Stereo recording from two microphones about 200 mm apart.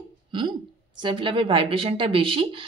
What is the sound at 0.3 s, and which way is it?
A woman's voice, 25° right (ahead or behind).